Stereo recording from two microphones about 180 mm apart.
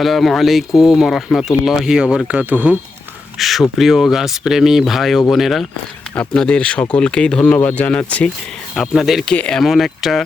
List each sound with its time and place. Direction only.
0.0 s speech: centre (ahead or behind)